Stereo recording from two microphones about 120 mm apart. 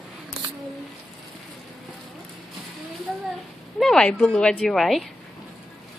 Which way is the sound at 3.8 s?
5° left (ahead or behind).